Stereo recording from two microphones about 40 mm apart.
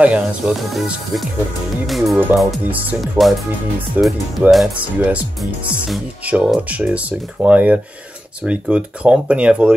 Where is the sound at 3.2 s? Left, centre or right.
Right.